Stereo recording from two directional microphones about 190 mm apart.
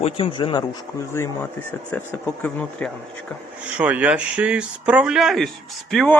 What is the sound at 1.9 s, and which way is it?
Speech, 5° left (ahead or behind).